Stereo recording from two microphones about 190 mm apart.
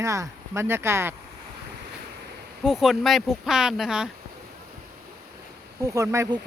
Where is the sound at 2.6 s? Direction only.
Centre (ahead or behind).